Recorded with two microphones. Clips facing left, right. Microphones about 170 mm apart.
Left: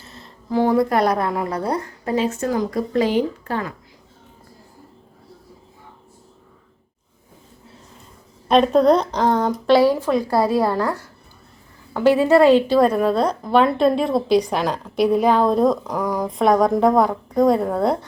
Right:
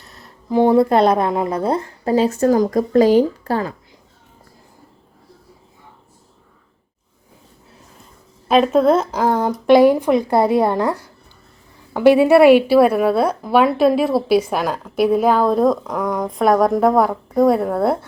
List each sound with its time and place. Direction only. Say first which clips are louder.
0.0 s a sound: left 2 dB; centre (ahead or behind)
0.5 s a woman's voice: right 4 dB; 25° right (ahead or behind)
8.4 s a woman's voice: right 1 dB; 5° right (ahead or behind); by 10.9 s 20° right (ahead or behind)
11.9 s a woman's voice: right 3 dB; 15° right (ahead or behind)